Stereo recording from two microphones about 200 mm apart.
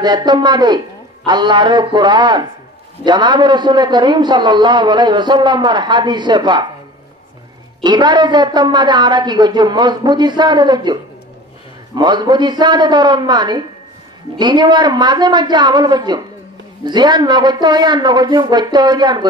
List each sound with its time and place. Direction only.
0.0 s a man's voice: 20° right (ahead or behind)
7.8 s a man's voice: 20° right (ahead or behind)